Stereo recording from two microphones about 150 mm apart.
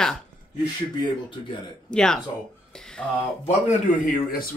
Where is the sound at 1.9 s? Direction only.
5° left (ahead or behind).